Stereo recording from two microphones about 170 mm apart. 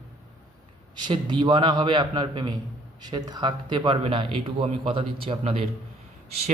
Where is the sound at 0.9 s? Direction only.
25° right (ahead or behind).